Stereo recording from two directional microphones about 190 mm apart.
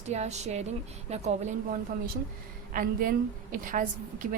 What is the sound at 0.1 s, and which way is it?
Speech, 35° right (ahead or behind).